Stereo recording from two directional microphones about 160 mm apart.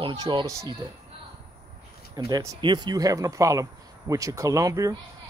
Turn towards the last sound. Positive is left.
turn(degrees=-20)  # may be behind; listen again after turning